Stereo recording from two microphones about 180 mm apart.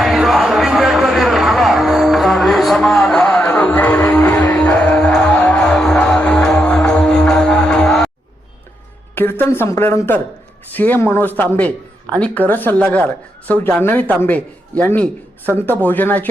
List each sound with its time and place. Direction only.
0.0 s music: centre (ahead or behind)
9.1 s a woman's voice: 10° left (ahead or behind)